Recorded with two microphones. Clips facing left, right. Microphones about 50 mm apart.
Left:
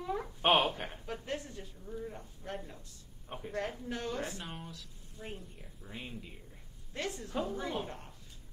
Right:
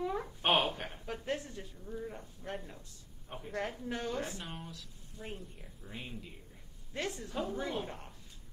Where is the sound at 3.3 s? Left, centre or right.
Centre.